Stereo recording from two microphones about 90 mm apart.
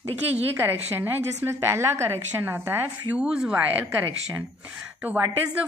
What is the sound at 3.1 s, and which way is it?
Speech, 10° right (ahead or behind).